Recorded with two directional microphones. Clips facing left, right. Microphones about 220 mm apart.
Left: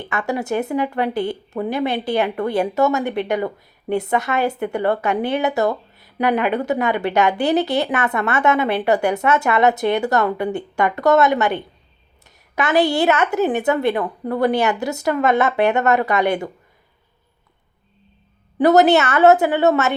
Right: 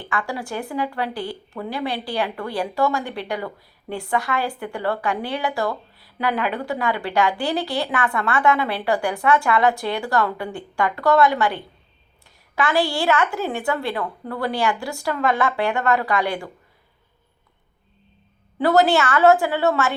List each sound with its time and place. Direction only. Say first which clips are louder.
0.0 s speech: left 4 dB; 20° left (ahead or behind)
18.6 s speech: left 4 dB; 20° left (ahead or behind)